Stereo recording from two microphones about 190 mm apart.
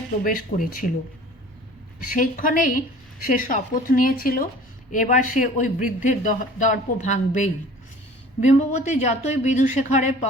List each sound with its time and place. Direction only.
0.3 s speech: 45° left (ahead or behind)
2.1 s speech: 45° left (ahead or behind)